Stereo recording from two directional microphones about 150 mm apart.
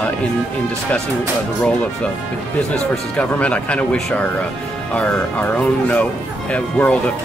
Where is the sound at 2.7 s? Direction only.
5° left (ahead or behind).